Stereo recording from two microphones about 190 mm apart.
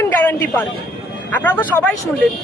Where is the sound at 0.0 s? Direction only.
10° left (ahead or behind).